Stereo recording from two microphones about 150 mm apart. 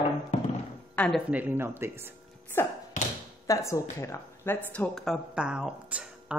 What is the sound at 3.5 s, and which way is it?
Speech, 20° left (ahead or behind).